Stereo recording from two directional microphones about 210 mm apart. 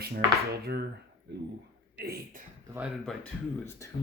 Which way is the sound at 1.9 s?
45° right (ahead or behind).